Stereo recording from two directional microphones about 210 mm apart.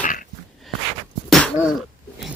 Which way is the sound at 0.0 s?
40° left (ahead or behind).